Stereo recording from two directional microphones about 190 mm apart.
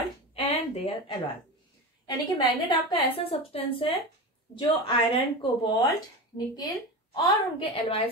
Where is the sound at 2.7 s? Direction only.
20° left (ahead or behind).